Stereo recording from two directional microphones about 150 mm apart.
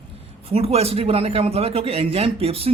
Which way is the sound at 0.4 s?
40° right (ahead or behind).